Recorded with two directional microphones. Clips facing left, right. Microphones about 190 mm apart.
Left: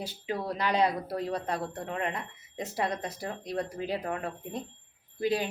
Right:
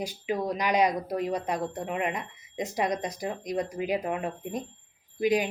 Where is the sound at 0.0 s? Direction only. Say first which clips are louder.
Right 4 dB; 15° right (ahead or behind).